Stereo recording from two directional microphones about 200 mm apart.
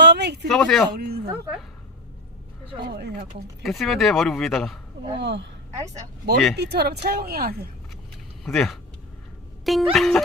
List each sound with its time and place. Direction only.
0.0 s a sound: 55° right (ahead or behind)
0.4 s speech: 5° left (ahead or behind)
0.9 s speech: 55° right (ahead or behind)
2.9 s speech: 55° right (ahead or behind)
3.6 s speech: centre (ahead or behind)
5.1 s speech: 60° right (ahead or behind)
5.7 s speech: 15° right (ahead or behind)
6.6 s speech: 55° right (ahead or behind)
8.4 s speech: centre (ahead or behind)